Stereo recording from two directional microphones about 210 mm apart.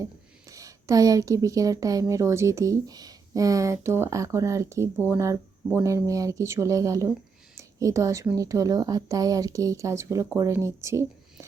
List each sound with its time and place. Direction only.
0.5 s speech: 15° right (ahead or behind)